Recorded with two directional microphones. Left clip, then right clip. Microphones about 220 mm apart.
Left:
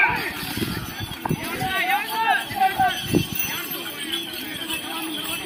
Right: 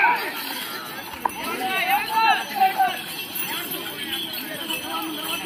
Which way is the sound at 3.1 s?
Centre (ahead or behind).